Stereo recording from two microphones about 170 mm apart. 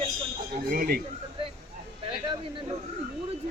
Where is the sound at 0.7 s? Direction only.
60° right (ahead or behind).